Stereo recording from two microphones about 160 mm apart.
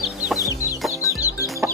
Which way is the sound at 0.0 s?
5° right (ahead or behind).